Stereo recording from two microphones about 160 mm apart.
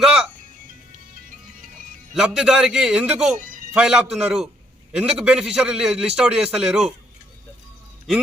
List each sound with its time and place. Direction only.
0.0 s music: 5° right (ahead or behind)
2.1 s a man's voice: 5° right (ahead or behind)
3.4 s music: 55° right (ahead or behind)
3.7 s a man's voice: 5° right (ahead or behind)